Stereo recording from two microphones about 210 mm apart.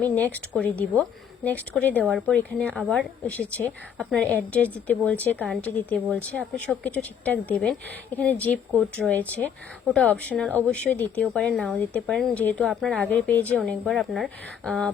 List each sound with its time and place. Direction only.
0.0 s a woman's voice: 10° left (ahead or behind)
2.8 s speech: 5° right (ahead or behind)
3.2 s a woman's voice: 5° left (ahead or behind)